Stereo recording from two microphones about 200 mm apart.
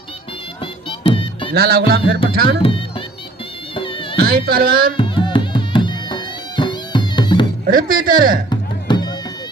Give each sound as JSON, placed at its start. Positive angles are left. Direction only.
{"t": 0.6, "sound": "music", "side_deg": 25}
{"t": 1.5, "sound": "speech", "side_deg": -50}
{"t": 2.6, "sound": "speech", "side_deg": 25}
{"t": 3.8, "sound": "music", "side_deg": 25}
{"t": 4.2, "sound": "speech", "side_deg": -50}
{"t": 4.9, "sound": "music", "side_deg": 25}
{"t": 7.6, "sound": "speech", "side_deg": -45}
{"t": 8.4, "sound": "music", "side_deg": 20}